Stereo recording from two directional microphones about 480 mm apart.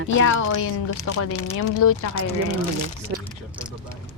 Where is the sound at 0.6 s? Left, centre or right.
Left.